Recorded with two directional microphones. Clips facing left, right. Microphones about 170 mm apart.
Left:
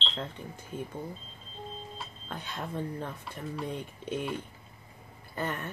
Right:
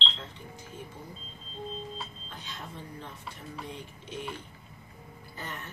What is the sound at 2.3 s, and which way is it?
Speech, 55° left (ahead or behind).